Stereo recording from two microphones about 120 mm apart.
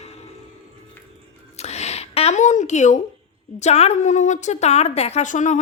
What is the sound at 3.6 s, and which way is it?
A woman's voice, 65° left (ahead or behind).